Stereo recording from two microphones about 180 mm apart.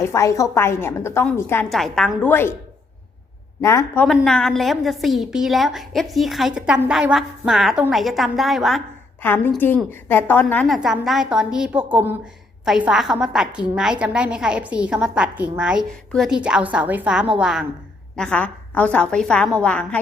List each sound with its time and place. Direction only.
0.0 s a woman's voice: 15° left (ahead or behind)
1.7 s a woman's voice: centre (ahead or behind)
3.6 s a woman's voice: 15° left (ahead or behind)
4.0 s a woman's voice: centre (ahead or behind)
9.2 s a woman's voice: 10° left (ahead or behind)